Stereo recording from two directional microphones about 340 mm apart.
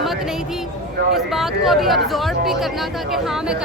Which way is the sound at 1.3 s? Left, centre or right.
Centre.